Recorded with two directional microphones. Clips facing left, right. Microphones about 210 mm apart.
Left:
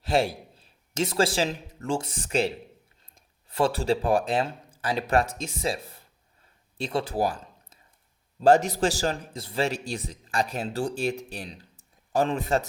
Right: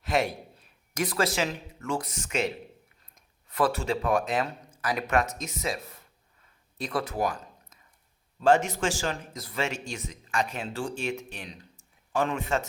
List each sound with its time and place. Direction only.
0.0 s a man's voice: 30° left (ahead or behind)